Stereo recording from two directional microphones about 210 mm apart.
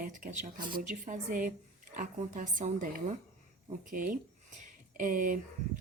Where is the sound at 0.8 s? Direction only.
35° right (ahead or behind).